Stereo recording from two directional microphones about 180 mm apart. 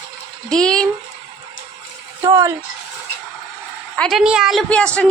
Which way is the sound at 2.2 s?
20° right (ahead or behind).